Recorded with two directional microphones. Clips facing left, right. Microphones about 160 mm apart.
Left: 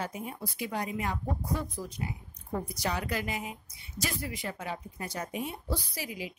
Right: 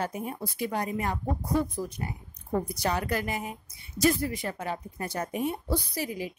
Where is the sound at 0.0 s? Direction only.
50° right (ahead or behind).